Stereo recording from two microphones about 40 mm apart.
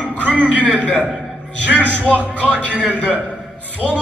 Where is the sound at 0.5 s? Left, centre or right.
Left.